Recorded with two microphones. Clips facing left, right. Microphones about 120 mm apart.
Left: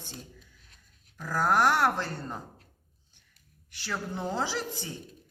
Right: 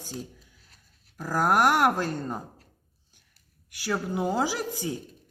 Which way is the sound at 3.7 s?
10° right (ahead or behind).